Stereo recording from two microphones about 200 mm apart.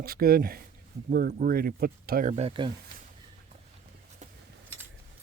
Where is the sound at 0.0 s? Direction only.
50° right (ahead or behind).